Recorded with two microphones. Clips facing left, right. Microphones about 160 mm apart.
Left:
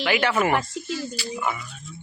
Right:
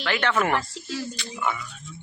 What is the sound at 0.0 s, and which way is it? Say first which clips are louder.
Speech: left 2 dB; 10° left (ahead or behind).